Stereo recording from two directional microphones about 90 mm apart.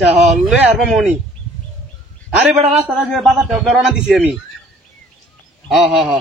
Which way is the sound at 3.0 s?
5° right (ahead or behind).